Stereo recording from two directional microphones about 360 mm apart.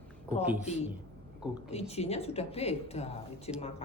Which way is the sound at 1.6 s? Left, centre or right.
Centre.